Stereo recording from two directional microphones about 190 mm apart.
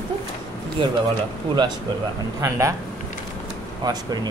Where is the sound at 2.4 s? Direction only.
15° right (ahead or behind).